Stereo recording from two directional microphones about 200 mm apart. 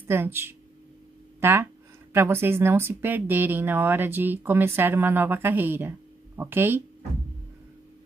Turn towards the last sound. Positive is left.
turn(degrees=-10)  # may be behind; listen again after turning